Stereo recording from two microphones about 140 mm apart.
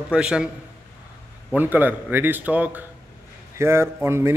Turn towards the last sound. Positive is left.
turn(degrees=-20)  # may be behind; listen again after turning